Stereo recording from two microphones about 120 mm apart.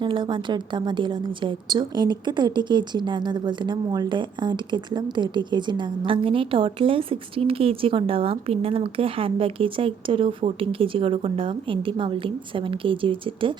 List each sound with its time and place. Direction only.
0.0 s a woman's voice: 40° right (ahead or behind)